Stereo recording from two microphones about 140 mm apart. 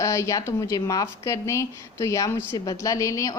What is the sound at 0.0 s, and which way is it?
Speech, 20° left (ahead or behind).